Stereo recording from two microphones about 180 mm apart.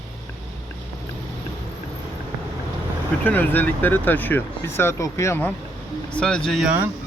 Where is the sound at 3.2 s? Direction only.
10° left (ahead or behind); by 6.9 s 10° right (ahead or behind).